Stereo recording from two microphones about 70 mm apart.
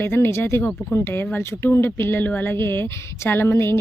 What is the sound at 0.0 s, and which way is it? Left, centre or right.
Speech, left.